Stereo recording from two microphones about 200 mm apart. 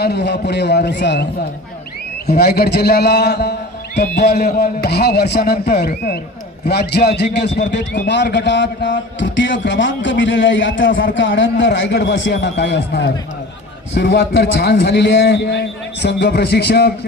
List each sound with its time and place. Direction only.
0.0 s a man's voice: 55° left (ahead or behind)